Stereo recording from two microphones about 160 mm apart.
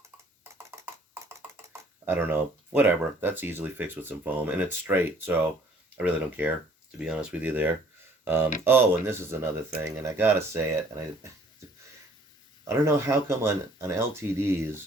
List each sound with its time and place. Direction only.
0.7 s a sound: 15° right (ahead or behind)
1.1 s speech: 15° right (ahead or behind)
12.6 s speech: 15° right (ahead or behind)